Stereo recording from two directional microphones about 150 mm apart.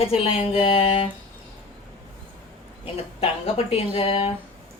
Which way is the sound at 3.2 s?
40° left (ahead or behind).